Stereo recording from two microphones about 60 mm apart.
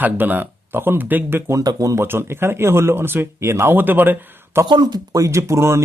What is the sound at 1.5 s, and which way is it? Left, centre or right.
Speech, right.